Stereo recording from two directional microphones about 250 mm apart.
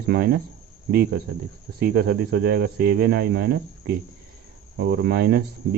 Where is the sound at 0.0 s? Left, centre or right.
Right.